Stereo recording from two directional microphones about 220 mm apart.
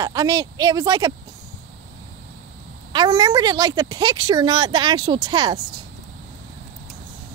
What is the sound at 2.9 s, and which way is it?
Speech, 20° right (ahead or behind).